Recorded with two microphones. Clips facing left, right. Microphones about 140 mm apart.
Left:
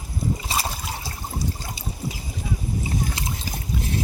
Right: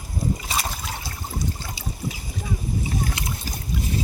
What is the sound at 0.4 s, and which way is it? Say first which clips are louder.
Trickle: left 1 dB; 30° left (ahead or behind).